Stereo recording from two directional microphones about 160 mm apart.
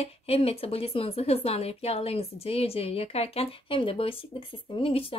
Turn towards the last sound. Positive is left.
turn(degrees=35)  # may be behind; listen again after turning